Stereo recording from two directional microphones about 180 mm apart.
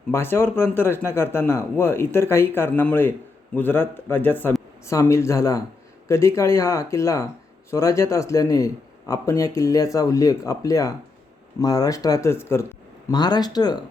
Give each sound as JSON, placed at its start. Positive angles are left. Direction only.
{"t": 0.1, "sound": "a man's voice", "side_deg": 10}